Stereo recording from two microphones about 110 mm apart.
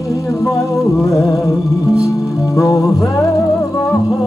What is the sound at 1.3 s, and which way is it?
Music, 30° left (ahead or behind).